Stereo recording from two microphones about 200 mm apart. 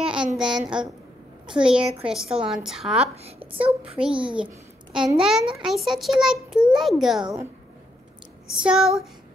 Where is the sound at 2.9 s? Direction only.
30° right (ahead or behind).